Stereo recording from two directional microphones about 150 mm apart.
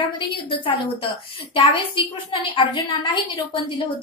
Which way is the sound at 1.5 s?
35° left (ahead or behind).